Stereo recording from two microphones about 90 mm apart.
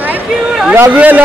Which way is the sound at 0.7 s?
20° right (ahead or behind).